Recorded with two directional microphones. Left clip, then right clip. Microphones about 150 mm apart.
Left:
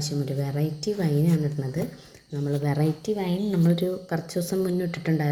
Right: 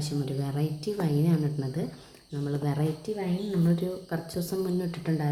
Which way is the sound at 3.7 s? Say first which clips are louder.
Left 5 dB; 30° left (ahead or behind).